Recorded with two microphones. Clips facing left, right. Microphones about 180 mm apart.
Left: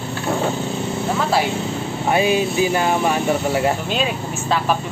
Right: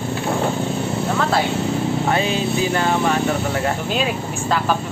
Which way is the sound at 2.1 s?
15° left (ahead or behind).